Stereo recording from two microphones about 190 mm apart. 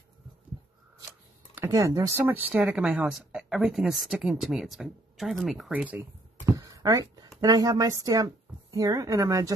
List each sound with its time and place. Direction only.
1.5 s speech: 15° right (ahead or behind)